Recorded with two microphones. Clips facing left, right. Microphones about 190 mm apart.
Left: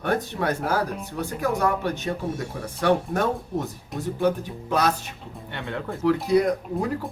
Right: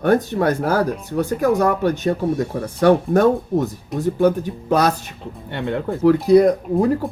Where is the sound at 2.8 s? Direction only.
40° right (ahead or behind).